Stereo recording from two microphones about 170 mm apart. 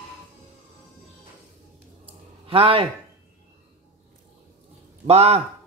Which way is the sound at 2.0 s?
30° right (ahead or behind).